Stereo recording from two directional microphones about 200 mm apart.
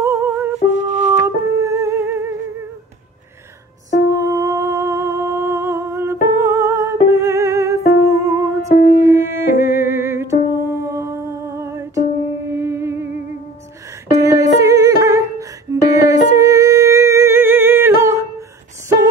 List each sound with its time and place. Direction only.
0.0 s music: 10° right (ahead or behind)
0.7 s music: 35° right (ahead or behind)
1.2 s music: 15° right (ahead or behind)
4.1 s humming: 15° right (ahead or behind)
6.4 s music: 15° right (ahead or behind)
8.6 s music: 45° left (ahead or behind)
9.0 s music: 10° right (ahead or behind)
12.4 s humming: 15° right (ahead or behind)
14.2 s music: 15° right (ahead or behind)
16.3 s humming: 15° right (ahead or behind)